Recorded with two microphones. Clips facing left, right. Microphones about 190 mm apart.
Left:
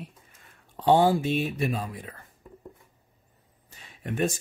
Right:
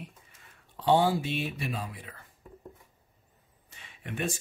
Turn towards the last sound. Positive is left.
turn(degrees=40)  # may be behind; listen again after turning